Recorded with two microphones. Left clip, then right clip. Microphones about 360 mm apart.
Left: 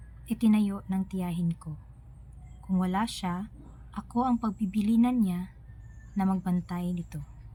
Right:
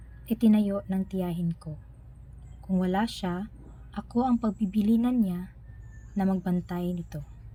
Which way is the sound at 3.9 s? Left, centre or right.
Left.